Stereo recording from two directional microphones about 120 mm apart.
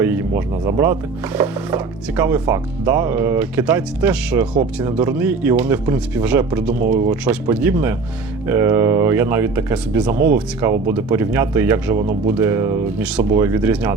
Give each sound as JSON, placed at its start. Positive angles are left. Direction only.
{"t": 0.0, "sound": "speech", "side_deg": -15}